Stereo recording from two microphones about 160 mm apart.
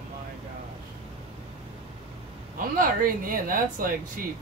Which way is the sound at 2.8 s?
60° right (ahead or behind).